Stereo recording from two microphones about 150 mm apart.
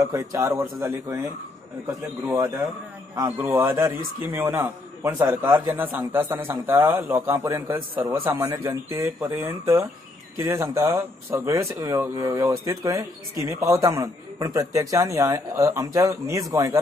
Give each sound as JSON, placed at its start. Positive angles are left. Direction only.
{"t": 0.0, "sound": "a man's voice", "side_deg": -20}